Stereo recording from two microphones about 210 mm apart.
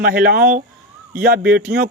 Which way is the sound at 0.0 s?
45° right (ahead or behind).